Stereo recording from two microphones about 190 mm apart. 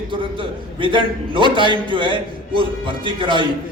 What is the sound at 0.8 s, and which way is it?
A man's voice, 25° right (ahead or behind).